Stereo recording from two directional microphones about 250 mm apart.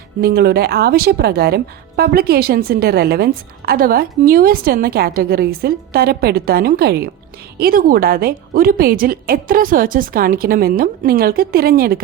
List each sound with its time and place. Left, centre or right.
0.2 s a woman's voice: right